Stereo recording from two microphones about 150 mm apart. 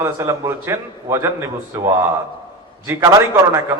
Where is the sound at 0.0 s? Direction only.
20° right (ahead or behind).